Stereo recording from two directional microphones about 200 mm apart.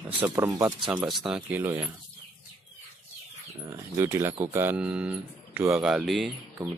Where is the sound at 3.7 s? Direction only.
10° right (ahead or behind).